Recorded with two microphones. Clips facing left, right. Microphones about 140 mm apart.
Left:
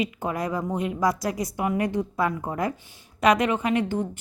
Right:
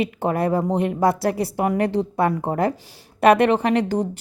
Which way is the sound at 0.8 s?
60° right (ahead or behind).